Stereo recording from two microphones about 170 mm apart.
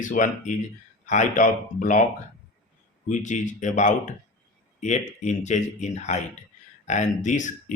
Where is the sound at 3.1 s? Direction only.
45° left (ahead or behind).